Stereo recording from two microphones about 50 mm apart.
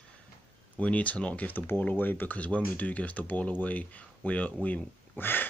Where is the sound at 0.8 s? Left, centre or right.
Left.